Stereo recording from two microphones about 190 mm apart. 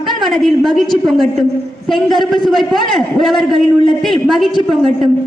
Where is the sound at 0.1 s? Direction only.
Centre (ahead or behind).